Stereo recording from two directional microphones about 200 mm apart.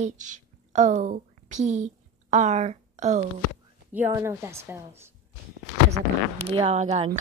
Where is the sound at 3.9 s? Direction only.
10° right (ahead or behind).